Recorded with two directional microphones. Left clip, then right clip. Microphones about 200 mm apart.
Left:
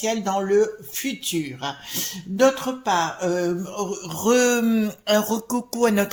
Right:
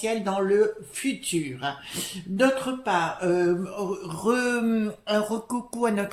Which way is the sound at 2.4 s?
35° left (ahead or behind).